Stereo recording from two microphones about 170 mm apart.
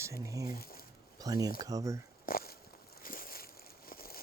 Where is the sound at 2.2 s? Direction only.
60° left (ahead or behind).